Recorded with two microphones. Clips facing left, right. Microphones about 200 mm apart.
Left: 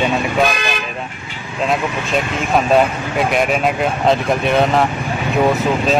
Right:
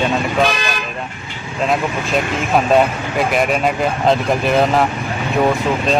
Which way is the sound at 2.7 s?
Centre (ahead or behind).